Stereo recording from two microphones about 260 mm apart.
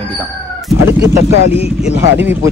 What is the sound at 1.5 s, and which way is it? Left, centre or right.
Speech, left.